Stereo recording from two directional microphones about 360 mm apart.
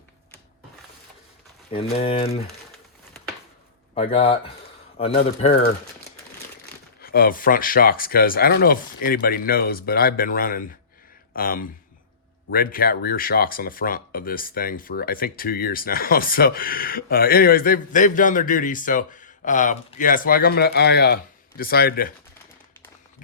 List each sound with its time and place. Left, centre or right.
1.7 s speech: centre
3.9 s speech: centre
7.0 s speech: left